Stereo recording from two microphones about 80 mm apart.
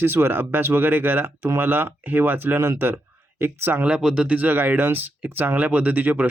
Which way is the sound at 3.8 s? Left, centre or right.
Centre.